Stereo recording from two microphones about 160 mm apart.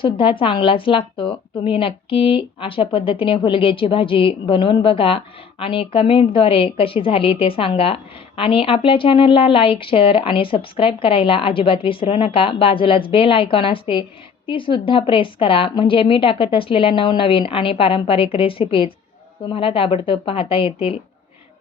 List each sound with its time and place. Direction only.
0.0 s a woman's voice: 30° left (ahead or behind)